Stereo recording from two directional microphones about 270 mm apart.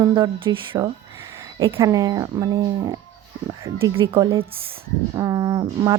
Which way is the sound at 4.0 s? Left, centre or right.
Centre.